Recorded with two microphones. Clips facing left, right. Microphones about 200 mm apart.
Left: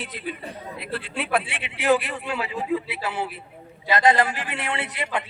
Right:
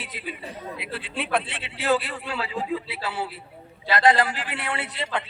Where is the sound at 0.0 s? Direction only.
5° right (ahead or behind).